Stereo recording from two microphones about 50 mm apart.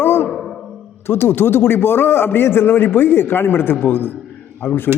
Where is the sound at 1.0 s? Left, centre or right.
Left.